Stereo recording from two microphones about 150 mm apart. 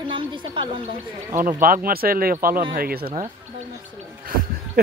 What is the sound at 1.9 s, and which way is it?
Speech, 80° right.